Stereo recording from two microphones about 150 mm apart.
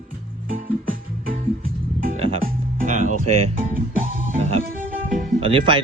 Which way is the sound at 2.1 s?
40° right (ahead or behind).